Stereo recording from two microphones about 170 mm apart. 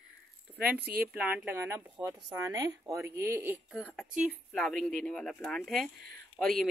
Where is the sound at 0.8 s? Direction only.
10° right (ahead or behind).